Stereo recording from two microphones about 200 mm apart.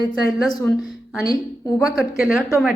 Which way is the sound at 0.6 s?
Centre (ahead or behind).